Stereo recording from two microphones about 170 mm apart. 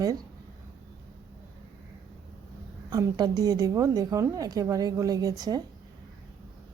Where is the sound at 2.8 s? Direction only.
20° right (ahead or behind).